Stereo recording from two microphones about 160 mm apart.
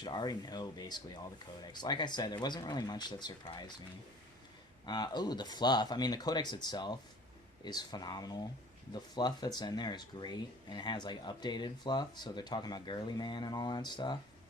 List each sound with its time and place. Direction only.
0.0 s speech: 25° left (ahead or behind)
4.9 s speech: 25° left (ahead or behind)